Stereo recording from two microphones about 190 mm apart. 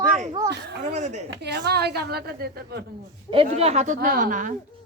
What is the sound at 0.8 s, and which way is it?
Speech, 40° right (ahead or behind).